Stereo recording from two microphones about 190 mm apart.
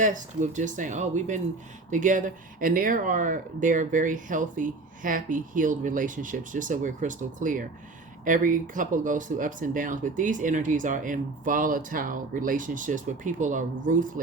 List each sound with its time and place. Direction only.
0.0 s speech: 40° right (ahead or behind)